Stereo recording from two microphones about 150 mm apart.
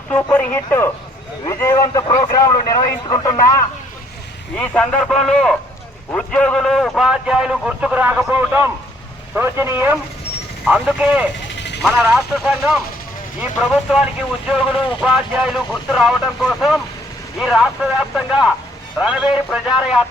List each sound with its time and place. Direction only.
0.1 s a man's voice: 10° left (ahead or behind)
4.5 s a man's voice: 5° left (ahead or behind)